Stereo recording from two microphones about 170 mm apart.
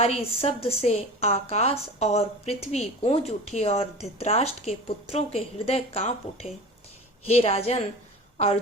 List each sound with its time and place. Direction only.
0.0 s a woman's voice: 35° left (ahead or behind)